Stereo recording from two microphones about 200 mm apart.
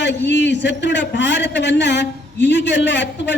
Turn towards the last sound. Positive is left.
turn(degrees=60)  # may be behind; listen again after turning